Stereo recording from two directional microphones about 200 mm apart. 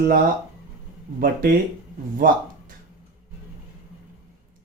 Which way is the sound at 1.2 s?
45° right (ahead or behind).